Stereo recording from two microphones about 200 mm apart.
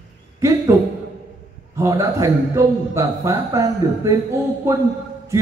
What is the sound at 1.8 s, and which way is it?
A man's voice, 15° right (ahead or behind).